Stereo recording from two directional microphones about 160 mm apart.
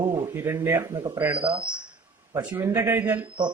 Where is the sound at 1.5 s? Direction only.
30° right (ahead or behind).